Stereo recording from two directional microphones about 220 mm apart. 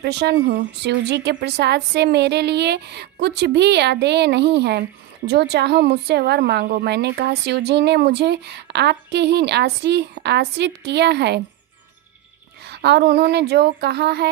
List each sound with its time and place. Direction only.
0.0 s speech: 50° right (ahead or behind)
12.6 s speech: 50° right (ahead or behind)